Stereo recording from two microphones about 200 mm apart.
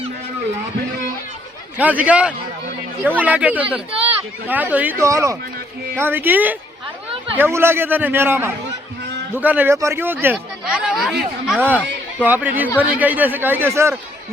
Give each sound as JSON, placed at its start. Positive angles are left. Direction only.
{"t": 1.8, "sound": "speech", "side_deg": -5}